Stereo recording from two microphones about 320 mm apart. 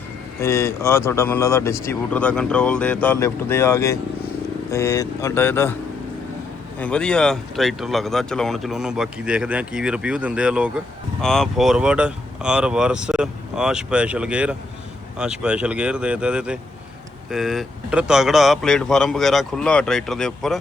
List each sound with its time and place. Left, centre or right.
0.3 s speech: centre
6.7 s speech: centre